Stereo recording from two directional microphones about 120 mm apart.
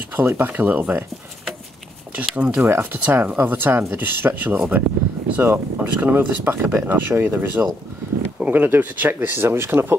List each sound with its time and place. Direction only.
0.1 s speech: 20° right (ahead or behind)
2.1 s speech: 10° right (ahead or behind)